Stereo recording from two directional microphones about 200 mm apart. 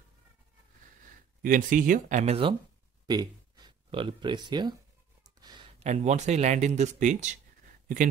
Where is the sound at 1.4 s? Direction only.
40° right (ahead or behind); by 4.7 s 20° right (ahead or behind).